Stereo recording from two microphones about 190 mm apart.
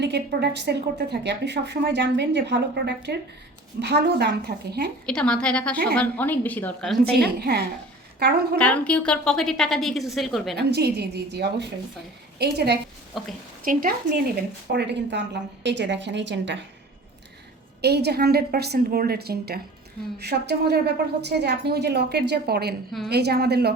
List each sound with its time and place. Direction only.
0.0 s a woman's voice: 60° right (ahead or behind)
5.0 s a woman's voice: 5° left (ahead or behind)
7.0 s a woman's voice: 55° right (ahead or behind)
8.5 s a woman's voice: 5° left (ahead or behind)
10.5 s a woman's voice: 60° right (ahead or behind)
13.2 s a woman's voice: centre (ahead or behind)
13.7 s speech: 45° right (ahead or behind)
14.7 s a woman's voice: 60° right (ahead or behind)
17.8 s a woman's voice: 60° right (ahead or behind)